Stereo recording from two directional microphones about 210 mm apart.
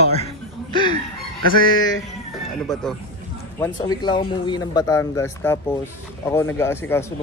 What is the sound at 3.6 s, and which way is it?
Speech, 20° left (ahead or behind).